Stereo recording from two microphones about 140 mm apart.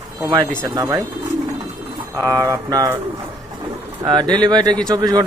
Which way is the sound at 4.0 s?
30° right (ahead or behind).